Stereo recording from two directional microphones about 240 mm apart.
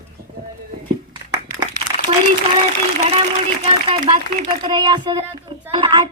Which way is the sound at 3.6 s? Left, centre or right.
Right.